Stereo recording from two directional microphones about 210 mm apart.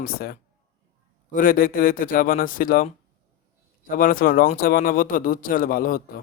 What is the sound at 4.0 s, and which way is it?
Speech, 40° left (ahead or behind).